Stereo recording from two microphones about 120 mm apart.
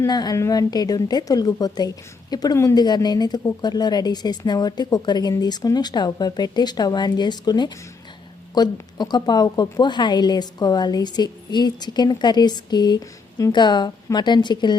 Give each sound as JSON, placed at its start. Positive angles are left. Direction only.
{"t": 0.0, "sound": "a woman's voice", "side_deg": 35}